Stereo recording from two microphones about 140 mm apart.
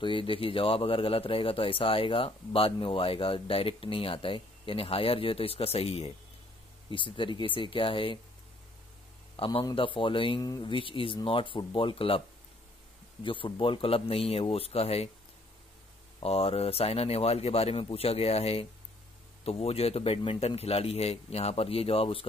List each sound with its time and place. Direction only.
0.0 s speech: 40° left (ahead or behind)
9.4 s speech: 35° left (ahead or behind)
13.2 s a man's voice: 35° left (ahead or behind)
16.2 s a man's voice: 45° left (ahead or behind)